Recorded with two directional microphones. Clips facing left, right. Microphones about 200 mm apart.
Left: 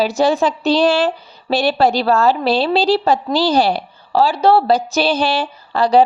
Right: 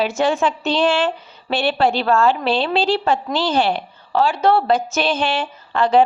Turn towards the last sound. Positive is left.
turn(degrees=35)  # may be behind; listen again after turning